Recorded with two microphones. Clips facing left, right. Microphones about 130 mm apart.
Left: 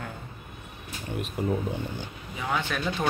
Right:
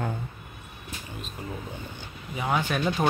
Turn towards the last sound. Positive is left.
turn(degrees=-20)  # may be behind; listen again after turning